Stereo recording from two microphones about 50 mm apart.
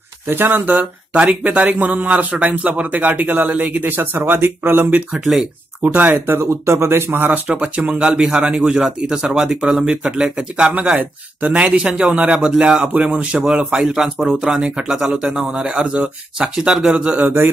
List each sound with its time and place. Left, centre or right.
0.3 s a man's voice: right
1.1 s a man's voice: right
6.4 s speech: right
7.1 s a man's voice: right; by 10.3 s centre
10.3 s speech: right
11.8 s speech: centre
12.2 s speech: right
13.7 s speech: centre
15.6 s speech: right
17.2 s mantra: right